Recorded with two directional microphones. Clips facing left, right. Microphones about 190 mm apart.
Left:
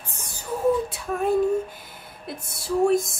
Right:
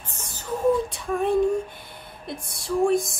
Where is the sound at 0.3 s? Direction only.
5° left (ahead or behind).